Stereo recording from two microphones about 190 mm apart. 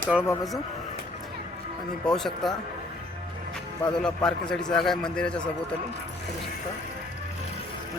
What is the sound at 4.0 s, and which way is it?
Speech, 5° left (ahead or behind).